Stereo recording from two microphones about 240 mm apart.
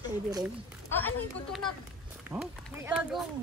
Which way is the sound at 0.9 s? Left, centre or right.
Centre.